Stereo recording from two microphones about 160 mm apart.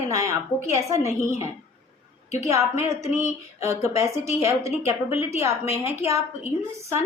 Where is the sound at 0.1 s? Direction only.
20° right (ahead or behind).